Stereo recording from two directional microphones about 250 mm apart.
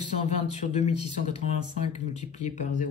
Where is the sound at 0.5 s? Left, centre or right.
Left.